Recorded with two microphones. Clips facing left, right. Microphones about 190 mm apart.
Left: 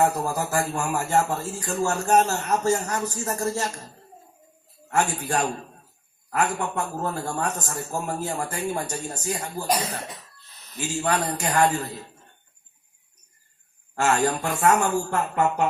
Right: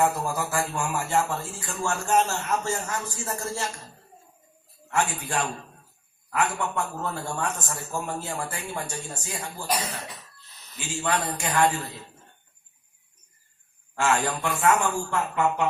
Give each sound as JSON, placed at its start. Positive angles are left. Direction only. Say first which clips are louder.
{"t": 0.0, "sound": "a man's voice", "louder": "left 2 dB", "side_deg": 40}
{"t": 4.9, "sound": "a man's voice", "louder": "left 3 dB", "side_deg": 40}
{"t": 10.8, "sound": "a man's voice", "louder": "left 3 dB", "side_deg": 40}
{"t": 13.9, "sound": "a man's voice", "louder": "left 3 dB", "side_deg": 40}